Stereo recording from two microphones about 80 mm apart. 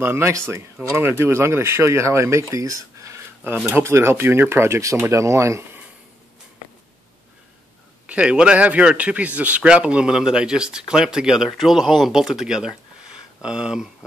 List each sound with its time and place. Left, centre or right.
0.0 s speech: right
3.5 s speech: right
8.1 s speech: centre